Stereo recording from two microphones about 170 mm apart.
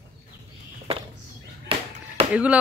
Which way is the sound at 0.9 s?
35° right (ahead or behind).